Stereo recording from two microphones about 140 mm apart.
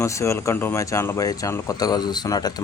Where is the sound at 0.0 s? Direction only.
20° left (ahead or behind).